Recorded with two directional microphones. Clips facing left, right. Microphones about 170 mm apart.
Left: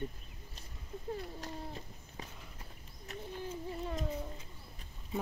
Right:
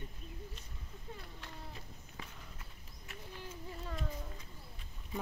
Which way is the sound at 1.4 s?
35° left (ahead or behind).